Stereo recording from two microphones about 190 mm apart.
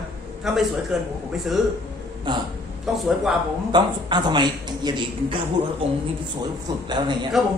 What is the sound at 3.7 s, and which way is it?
Speech, 25° right (ahead or behind).